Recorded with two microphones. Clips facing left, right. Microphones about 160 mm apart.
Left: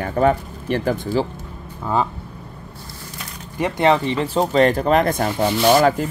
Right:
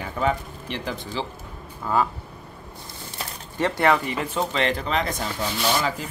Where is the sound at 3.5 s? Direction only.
15° left (ahead or behind).